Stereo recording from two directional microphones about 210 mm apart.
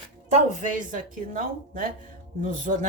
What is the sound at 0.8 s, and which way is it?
A man's voice, 40° right (ahead or behind).